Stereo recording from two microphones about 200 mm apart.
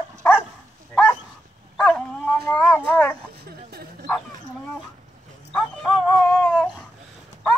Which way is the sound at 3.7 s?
50° right (ahead or behind).